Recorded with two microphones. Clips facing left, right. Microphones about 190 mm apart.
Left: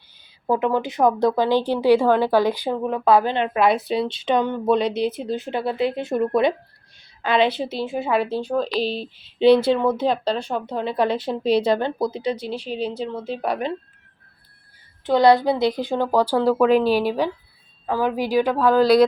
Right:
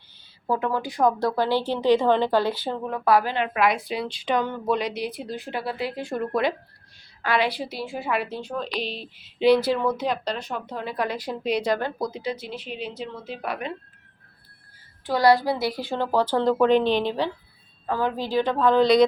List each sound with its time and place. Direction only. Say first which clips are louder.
0.4 s a woman's voice: left 5 dB; 20° left (ahead or behind)
15.0 s a woman's voice: left 4 dB; 20° left (ahead or behind); by 19.0 s 5° left (ahead or behind)